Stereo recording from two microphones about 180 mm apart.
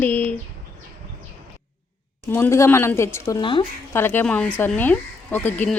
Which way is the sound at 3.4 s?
30° left (ahead or behind).